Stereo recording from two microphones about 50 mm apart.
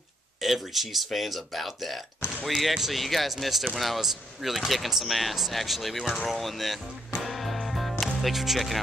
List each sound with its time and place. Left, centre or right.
0.4 s speech: centre
7.2 s music: centre